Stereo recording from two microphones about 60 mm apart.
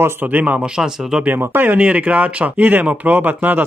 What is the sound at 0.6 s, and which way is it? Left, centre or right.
Speech, centre.